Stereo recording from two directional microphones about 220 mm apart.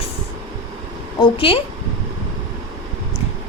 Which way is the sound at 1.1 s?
25° left (ahead or behind).